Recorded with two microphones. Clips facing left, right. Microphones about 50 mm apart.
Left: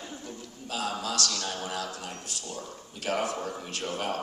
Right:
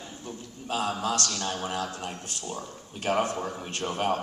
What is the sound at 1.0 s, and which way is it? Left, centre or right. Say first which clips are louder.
Speech: right 3 dB; right.